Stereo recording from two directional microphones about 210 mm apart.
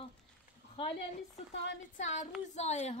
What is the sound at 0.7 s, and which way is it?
A woman's voice, 25° left (ahead or behind).